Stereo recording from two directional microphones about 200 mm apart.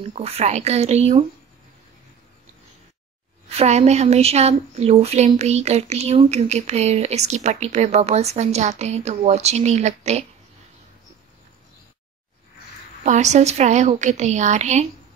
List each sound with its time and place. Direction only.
0.1 s speech: 30° right (ahead or behind)
3.4 s speech: 30° right (ahead or behind)
13.0 s speech: 35° right (ahead or behind)